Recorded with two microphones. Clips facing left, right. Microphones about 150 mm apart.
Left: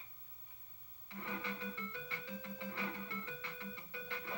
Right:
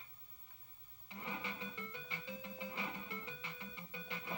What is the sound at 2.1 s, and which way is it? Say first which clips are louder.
Music: left 1 dB; 15° right (ahead or behind).